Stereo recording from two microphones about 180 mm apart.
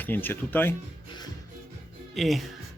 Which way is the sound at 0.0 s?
10° left (ahead or behind).